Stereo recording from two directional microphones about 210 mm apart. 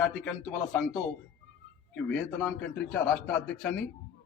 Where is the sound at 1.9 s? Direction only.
5° left (ahead or behind).